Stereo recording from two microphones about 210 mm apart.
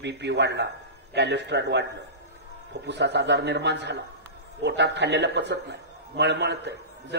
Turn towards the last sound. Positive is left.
turn(degrees=-55)  # may be behind; listen again after turning